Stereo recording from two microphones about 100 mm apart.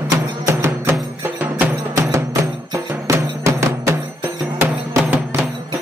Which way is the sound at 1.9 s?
30° right (ahead or behind).